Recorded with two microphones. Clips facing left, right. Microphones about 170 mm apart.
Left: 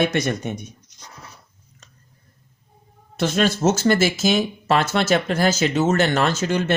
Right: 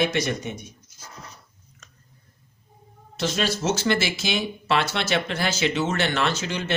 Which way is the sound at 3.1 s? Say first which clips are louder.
Left 5 dB; 55° left (ahead or behind).